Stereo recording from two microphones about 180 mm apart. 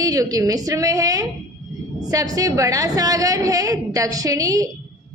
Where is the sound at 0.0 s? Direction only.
20° right (ahead or behind).